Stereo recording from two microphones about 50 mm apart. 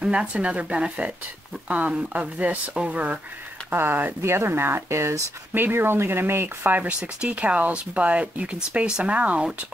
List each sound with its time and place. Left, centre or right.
0.0 s speech: right
3.7 s speech: right
5.5 s speech: right
6.8 s speech: right